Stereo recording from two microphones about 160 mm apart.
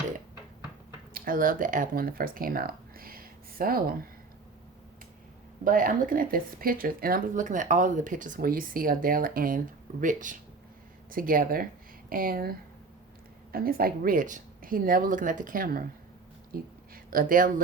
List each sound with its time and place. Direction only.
1.1 s speech: 60° right (ahead or behind)
5.6 s speech: 60° right (ahead or behind)
16.5 s a sound: 65° right (ahead or behind)